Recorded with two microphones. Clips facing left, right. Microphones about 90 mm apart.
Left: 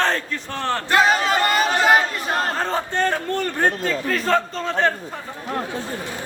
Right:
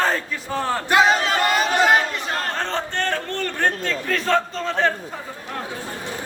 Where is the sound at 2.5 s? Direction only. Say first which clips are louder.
Left 2 dB; 10° left (ahead or behind).